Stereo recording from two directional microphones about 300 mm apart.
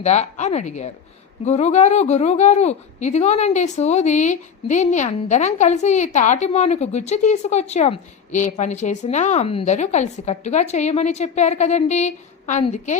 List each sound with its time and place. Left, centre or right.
0.0 s a woman's voice: left